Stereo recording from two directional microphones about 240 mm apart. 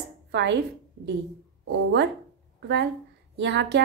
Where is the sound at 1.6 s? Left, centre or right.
Right.